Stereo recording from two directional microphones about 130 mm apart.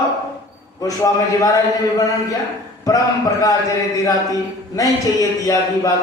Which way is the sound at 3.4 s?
25° left (ahead or behind).